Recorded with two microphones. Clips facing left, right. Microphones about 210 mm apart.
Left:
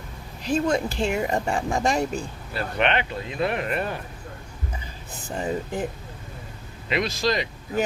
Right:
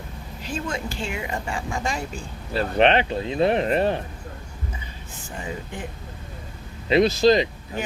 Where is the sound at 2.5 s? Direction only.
35° right (ahead or behind).